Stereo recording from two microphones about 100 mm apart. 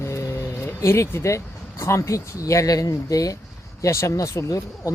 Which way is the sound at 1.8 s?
30° left (ahead or behind).